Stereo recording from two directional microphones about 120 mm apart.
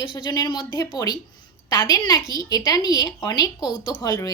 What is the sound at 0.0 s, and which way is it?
A woman's voice, 40° left (ahead or behind).